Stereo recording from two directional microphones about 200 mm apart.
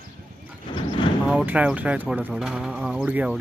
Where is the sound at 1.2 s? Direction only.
5° right (ahead or behind).